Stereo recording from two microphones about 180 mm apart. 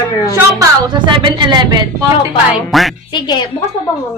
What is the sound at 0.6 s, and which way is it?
A woman's voice, 25° right (ahead or behind).